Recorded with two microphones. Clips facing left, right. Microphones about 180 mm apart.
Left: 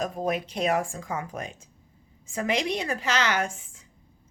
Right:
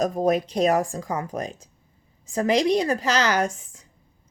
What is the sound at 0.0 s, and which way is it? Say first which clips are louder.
A woman's voice: right 7 dB; 40° right (ahead or behind).